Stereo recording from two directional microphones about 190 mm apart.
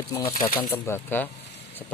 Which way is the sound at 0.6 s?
15° left (ahead or behind).